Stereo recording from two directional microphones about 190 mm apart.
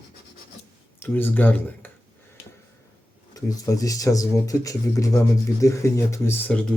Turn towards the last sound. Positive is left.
turn(degrees=5)  # may be behind; listen again after turning